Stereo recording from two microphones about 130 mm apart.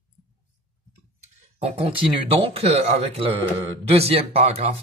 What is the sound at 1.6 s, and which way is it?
Speech, 45° right (ahead or behind).